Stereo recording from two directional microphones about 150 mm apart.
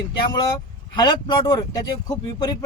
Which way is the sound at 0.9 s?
30° left (ahead or behind).